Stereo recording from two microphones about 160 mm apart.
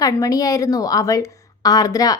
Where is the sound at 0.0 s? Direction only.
25° left (ahead or behind).